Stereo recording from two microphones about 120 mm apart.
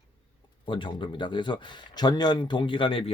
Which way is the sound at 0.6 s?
45° left (ahead or behind).